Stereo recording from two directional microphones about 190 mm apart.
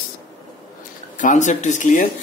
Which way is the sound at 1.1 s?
40° left (ahead or behind).